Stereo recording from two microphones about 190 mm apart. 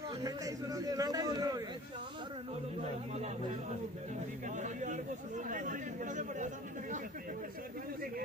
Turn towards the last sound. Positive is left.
turn(degrees=-40)  # may be behind; listen again after turning